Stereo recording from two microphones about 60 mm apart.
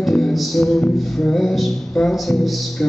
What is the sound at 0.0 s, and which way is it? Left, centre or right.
Music, centre.